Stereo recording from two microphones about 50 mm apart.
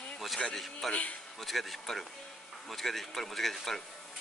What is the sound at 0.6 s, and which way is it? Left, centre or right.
Speech, centre.